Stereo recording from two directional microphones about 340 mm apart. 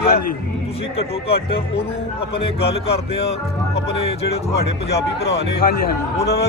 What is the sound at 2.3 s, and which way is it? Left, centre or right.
Speech, centre.